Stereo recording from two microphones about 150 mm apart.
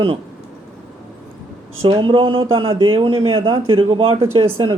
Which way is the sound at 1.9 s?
35° right (ahead or behind).